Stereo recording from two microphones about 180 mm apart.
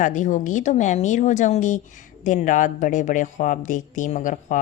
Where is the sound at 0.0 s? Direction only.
45° left (ahead or behind).